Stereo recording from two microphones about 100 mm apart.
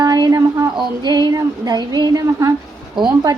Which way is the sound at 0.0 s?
40° right (ahead or behind).